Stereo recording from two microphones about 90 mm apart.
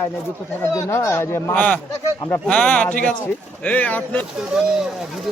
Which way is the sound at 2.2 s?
30° left (ahead or behind).